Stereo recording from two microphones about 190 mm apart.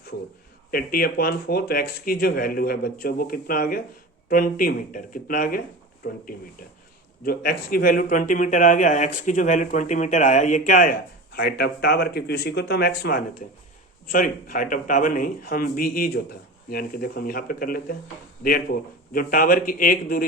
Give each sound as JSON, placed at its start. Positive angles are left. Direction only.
{"t": 0.7, "sound": "speech", "side_deg": 50}